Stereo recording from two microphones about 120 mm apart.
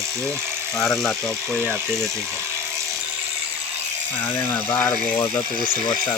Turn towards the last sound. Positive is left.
turn(degrees=20)  # may be behind; listen again after turning